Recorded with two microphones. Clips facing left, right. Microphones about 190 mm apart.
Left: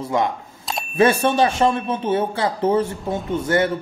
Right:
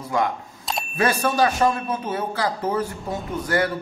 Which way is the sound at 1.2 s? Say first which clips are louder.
Left 2 dB; 25° left (ahead or behind).